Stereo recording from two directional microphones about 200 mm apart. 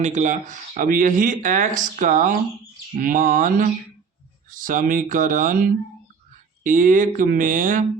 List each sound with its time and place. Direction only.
0.0 s speech: 35° right (ahead or behind)